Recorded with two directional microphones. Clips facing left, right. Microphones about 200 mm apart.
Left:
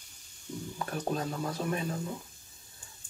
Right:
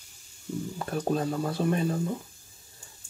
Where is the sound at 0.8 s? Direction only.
30° right (ahead or behind).